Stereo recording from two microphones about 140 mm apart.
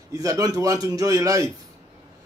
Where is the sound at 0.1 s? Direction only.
25° right (ahead or behind).